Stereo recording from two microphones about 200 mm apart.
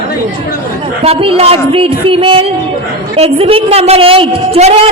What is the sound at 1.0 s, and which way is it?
A woman's voice, 30° right (ahead or behind).